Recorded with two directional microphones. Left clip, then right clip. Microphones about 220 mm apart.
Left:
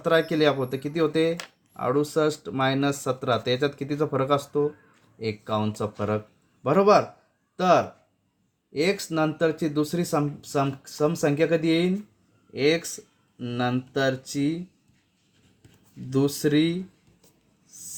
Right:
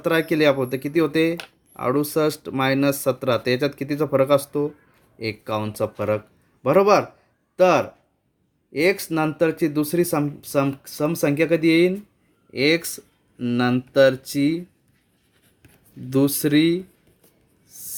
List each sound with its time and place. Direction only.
0.0 s speech: 45° right (ahead or behind)
8.7 s speech: 45° right (ahead or behind)
16.0 s speech: 50° right (ahead or behind)